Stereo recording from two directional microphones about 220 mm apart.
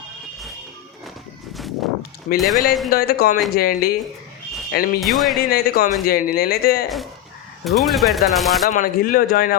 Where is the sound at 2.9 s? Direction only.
45° left (ahead or behind).